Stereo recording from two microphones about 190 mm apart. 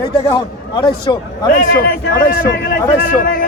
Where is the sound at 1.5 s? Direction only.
55° left (ahead or behind).